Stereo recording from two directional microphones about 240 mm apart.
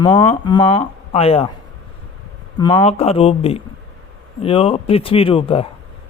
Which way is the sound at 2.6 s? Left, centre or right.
Left.